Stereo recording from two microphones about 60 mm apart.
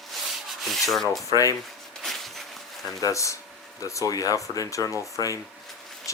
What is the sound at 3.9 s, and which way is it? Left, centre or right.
Speech, left.